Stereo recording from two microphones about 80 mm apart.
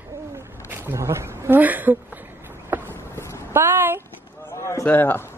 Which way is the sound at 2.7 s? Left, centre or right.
Right.